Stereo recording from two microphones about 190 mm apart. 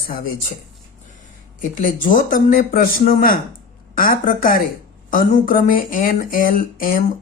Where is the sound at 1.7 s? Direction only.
45° left (ahead or behind).